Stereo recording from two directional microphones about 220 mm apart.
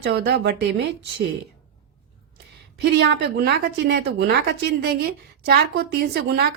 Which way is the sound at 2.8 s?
50° right (ahead or behind).